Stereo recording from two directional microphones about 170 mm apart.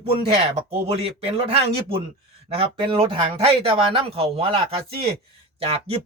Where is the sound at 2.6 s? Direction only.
30° right (ahead or behind).